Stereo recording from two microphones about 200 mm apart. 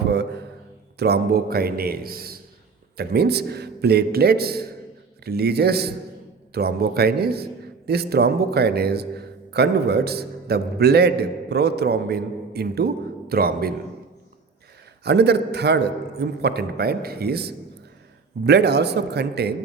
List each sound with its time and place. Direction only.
0.1 s a sound: 55° right (ahead or behind)
0.9 s a man's voice: 55° right (ahead or behind)
15.0 s a man's voice: 55° right (ahead or behind)